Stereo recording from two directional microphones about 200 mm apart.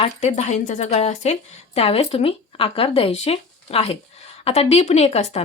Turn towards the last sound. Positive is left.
turn(degrees=30)  # may be behind; listen again after turning